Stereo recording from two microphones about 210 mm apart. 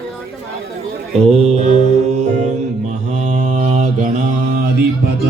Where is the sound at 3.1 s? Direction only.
35° right (ahead or behind).